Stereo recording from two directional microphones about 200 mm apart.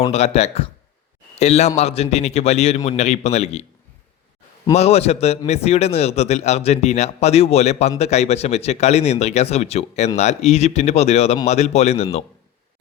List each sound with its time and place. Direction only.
0.1 s a man's voice: 35° left (ahead or behind)
4.7 s a man's voice: 30° left (ahead or behind)